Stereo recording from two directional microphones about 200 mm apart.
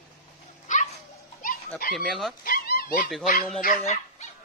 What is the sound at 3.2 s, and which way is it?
Speech, 40° left (ahead or behind).